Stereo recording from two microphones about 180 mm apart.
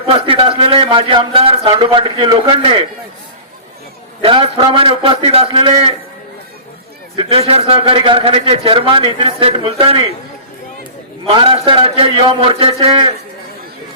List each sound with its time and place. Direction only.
0.1 s a man's voice: 30° right (ahead or behind)
4.2 s a man's voice: 30° right (ahead or behind)
7.2 s a man's voice: 30° right (ahead or behind)
11.3 s a man's voice: 30° right (ahead or behind)